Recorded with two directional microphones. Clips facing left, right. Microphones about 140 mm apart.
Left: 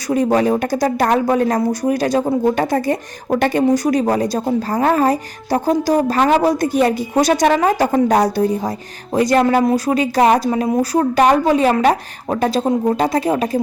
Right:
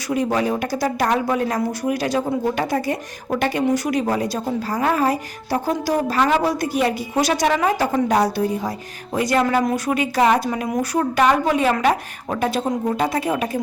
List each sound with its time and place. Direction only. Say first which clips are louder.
0.1 s speech: left 5 dB; 40° left (ahead or behind)